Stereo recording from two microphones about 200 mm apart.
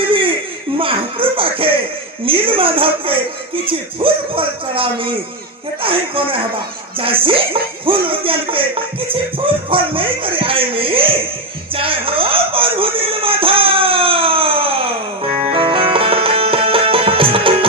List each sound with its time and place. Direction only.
0.0 s a sound: 25° right (ahead or behind)
0.8 s music: 25° right (ahead or behind)
2.2 s speech: 25° right (ahead or behind)
11.7 s music: 25° right (ahead or behind)